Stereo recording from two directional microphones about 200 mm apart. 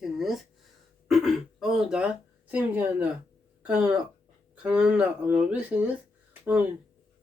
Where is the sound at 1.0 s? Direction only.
Centre (ahead or behind).